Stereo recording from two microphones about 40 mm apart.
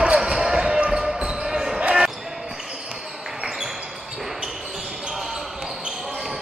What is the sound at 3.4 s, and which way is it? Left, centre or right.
Basketball bounce, centre.